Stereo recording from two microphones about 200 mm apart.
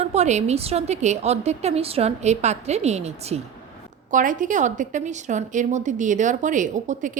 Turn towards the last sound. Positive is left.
turn(degrees=-40)  # may be behind; listen again after turning